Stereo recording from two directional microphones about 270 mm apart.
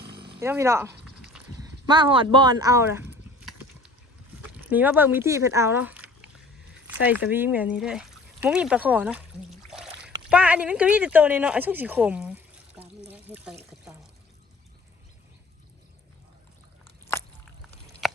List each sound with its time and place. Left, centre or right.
0.1 s speech: centre
1.0 s a sound: centre
1.5 s speech: centre
4.7 s speech: centre
9.6 s rowboat: centre
10.2 s speech: centre
13.1 s water: centre
18.0 s a sound: centre